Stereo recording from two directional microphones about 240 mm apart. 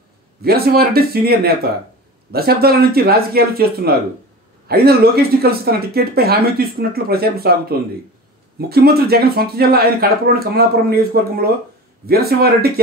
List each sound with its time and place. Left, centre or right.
0.4 s speech: right
12.1 s speech: right